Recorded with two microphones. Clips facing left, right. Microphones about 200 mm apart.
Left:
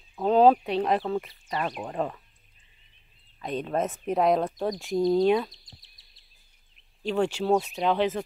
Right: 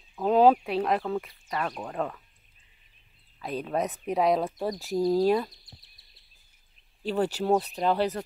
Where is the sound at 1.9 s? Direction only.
Centre (ahead or behind).